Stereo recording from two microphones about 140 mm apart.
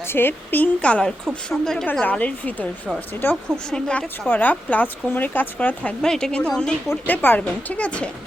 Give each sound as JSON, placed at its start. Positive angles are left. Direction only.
{"t": 0.1, "sound": "a woman's voice", "side_deg": 15}